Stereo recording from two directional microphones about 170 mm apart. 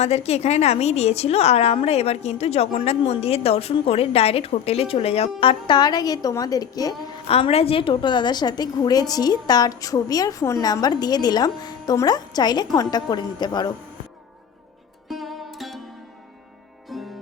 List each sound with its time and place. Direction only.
0.0 s a woman's voice: 40° left (ahead or behind); by 6.9 s 20° left (ahead or behind)
7.3 s a woman's voice: 35° left (ahead or behind)
15.1 s music: centre (ahead or behind)
16.9 s music: centre (ahead or behind)